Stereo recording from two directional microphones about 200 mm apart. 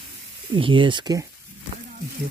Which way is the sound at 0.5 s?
25° right (ahead or behind).